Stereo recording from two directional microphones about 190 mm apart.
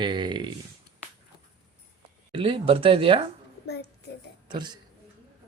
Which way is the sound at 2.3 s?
30° right (ahead or behind).